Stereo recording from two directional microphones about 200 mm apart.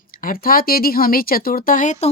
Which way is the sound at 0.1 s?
45° left (ahead or behind).